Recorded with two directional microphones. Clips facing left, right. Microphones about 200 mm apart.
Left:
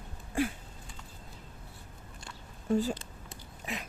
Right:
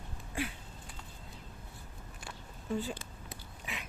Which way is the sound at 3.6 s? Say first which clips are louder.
Left 6 dB; 40° left (ahead or behind).